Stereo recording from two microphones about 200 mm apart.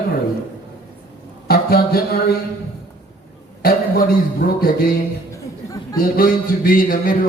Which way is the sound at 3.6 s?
50° left (ahead or behind).